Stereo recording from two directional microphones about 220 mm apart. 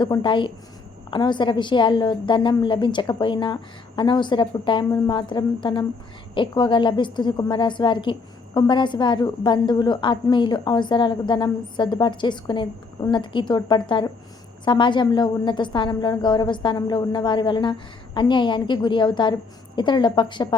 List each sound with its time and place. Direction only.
0.0 s a woman's voice: 20° left (ahead or behind)